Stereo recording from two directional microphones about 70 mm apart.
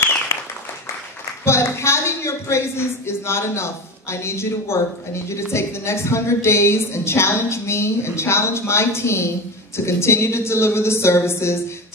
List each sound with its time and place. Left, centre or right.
0.0 s applause: left
1.4 s a woman's voice: left